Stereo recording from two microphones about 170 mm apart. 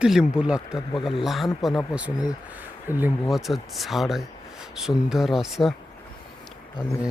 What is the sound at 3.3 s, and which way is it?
Speech, centre (ahead or behind).